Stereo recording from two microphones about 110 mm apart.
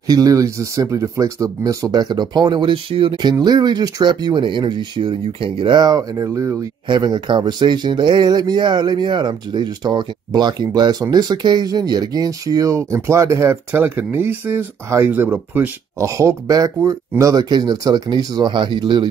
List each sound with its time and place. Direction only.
0.0 s speech: 30° right (ahead or behind)
6.9 s speech: 45° right (ahead or behind)